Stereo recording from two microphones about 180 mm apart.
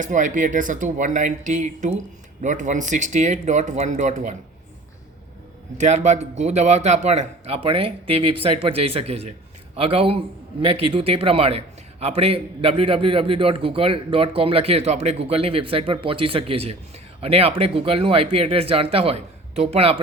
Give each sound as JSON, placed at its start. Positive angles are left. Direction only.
{"t": 0.0, "sound": "a man's voice", "side_deg": -45}
{"t": 5.7, "sound": "a man's voice", "side_deg": -40}